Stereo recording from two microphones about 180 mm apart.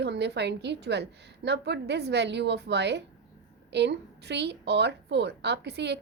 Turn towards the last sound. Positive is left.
turn(degrees=-70)  # may be behind; listen again after turning